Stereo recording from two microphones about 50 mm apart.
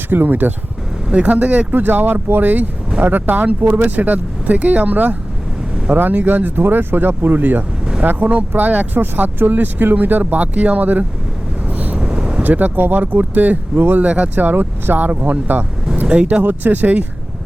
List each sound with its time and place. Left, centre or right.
0.1 s speech: right
1.1 s speech: right
1.7 s speech: right
11.7 s vehicle: right
11.9 s vehicle: centre
12.4 s speech: right
16.0 s speech: right
16.4 s speech: right